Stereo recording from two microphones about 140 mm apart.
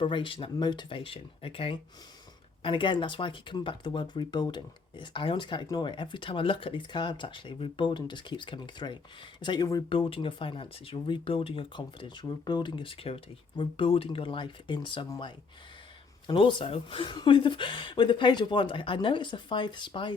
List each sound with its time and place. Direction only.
0.0 s speech: 35° left (ahead or behind)
9.9 s speech: 40° left (ahead or behind)